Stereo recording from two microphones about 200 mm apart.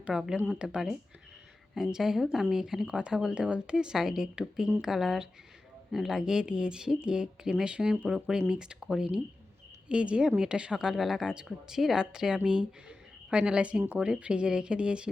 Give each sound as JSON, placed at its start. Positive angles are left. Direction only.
{"t": 0.0, "sound": "speech", "side_deg": -5}